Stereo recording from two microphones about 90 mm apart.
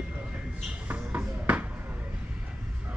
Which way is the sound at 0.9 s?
15° right (ahead or behind).